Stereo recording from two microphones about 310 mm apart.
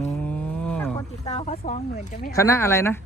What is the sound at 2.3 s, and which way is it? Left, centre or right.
Speech, centre.